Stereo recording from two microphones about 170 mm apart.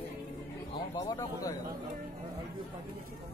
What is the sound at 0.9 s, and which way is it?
Speech, 20° left (ahead or behind).